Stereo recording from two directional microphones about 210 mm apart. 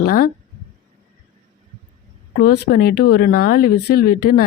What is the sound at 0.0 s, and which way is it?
Speech, 40° left (ahead or behind).